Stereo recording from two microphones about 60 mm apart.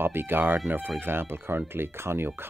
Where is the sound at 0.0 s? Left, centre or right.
Right.